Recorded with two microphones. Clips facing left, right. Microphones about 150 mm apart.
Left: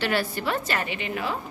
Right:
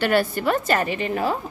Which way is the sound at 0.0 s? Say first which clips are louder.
Right 6 dB; 50° right (ahead or behind).